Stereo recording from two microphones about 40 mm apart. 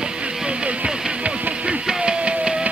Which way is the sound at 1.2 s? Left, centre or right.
Right.